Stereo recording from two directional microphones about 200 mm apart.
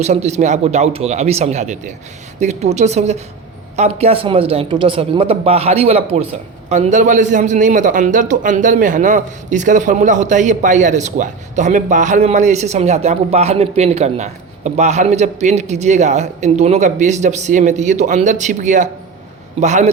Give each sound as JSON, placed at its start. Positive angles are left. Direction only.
{"t": 0.0, "sound": "a man's voice", "side_deg": -35}